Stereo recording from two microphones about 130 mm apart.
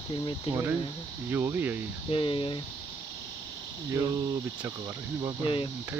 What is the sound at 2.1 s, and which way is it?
Speech, 45° left (ahead or behind).